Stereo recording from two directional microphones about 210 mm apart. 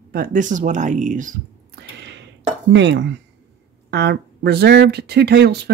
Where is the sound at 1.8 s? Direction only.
55° right (ahead or behind).